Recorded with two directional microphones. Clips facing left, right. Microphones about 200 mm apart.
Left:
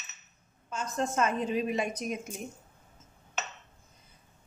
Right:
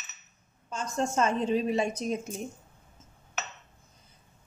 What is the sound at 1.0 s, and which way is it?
A woman's voice, 30° right (ahead or behind).